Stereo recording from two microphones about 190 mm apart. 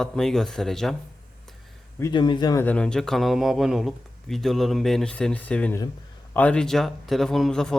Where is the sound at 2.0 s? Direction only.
25° left (ahead or behind).